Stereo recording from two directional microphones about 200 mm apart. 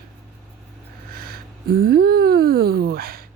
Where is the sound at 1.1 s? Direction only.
50° right (ahead or behind).